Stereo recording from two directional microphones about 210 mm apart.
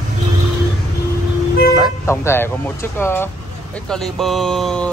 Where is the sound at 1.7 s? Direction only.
10° left (ahead or behind).